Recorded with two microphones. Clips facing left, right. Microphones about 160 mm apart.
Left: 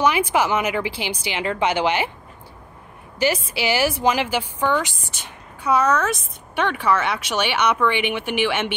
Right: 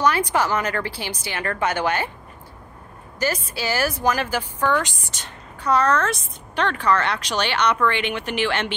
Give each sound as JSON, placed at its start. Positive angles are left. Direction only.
{"t": 0.0, "sound": "speech", "side_deg": 10}
{"t": 3.6, "sound": "speech", "side_deg": 15}